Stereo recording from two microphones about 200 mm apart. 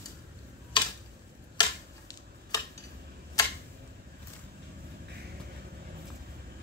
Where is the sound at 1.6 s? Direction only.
20° left (ahead or behind).